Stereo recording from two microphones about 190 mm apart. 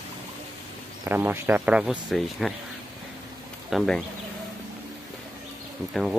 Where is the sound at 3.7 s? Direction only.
Centre (ahead or behind).